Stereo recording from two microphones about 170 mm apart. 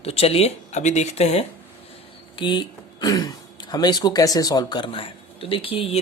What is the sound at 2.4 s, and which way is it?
Speech, 30° left (ahead or behind).